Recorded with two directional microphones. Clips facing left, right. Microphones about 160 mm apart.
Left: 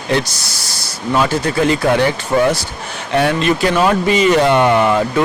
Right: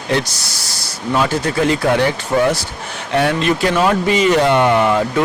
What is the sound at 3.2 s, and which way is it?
Speech, 10° left (ahead or behind).